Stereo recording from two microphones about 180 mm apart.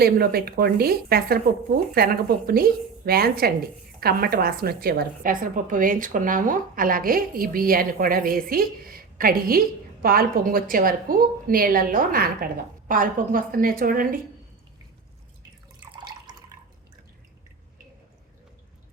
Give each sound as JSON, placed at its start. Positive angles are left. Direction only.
{"t": 0.0, "sound": "a woman's voice", "side_deg": -60}
{"t": 15.8, "sound": "drip", "side_deg": -25}